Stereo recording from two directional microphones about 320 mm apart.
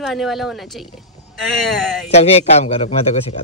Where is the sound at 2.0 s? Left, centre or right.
Centre.